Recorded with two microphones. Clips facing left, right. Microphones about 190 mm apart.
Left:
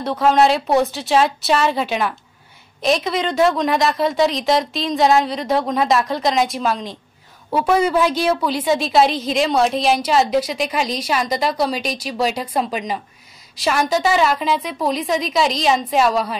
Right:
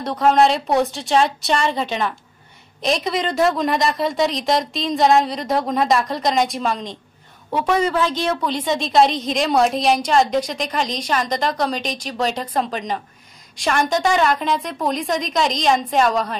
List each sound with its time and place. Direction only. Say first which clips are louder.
0.0 s a woman's voice: even; centre (ahead or behind)